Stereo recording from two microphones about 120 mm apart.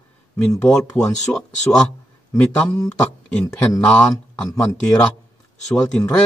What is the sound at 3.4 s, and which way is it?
Speech, 30° left (ahead or behind).